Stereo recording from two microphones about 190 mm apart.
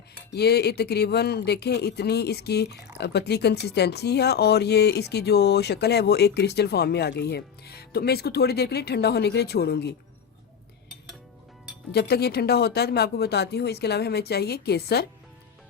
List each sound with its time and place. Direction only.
0.3 s speech: 60° left (ahead or behind)
11.9 s speech: 55° left (ahead or behind)